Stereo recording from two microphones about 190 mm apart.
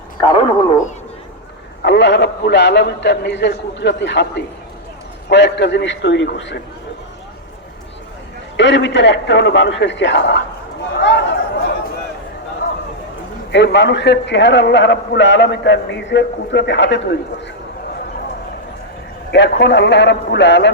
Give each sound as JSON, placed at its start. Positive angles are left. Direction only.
{"t": 0.2, "sound": "speech", "side_deg": 25}
{"t": 1.8, "sound": "a man's voice", "side_deg": 70}
{"t": 8.5, "sound": "a man's voice", "side_deg": 70}
{"t": 10.9, "sound": "chatter", "side_deg": 65}
{"t": 13.5, "sound": "a man's voice", "side_deg": 65}
{"t": 19.3, "sound": "a man's voice", "side_deg": 65}